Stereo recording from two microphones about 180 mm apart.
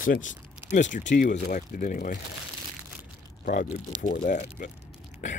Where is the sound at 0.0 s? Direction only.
50° left (ahead or behind).